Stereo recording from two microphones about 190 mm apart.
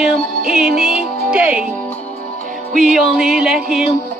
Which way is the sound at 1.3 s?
5° right (ahead or behind).